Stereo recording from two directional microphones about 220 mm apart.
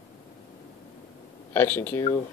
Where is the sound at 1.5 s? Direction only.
10° left (ahead or behind).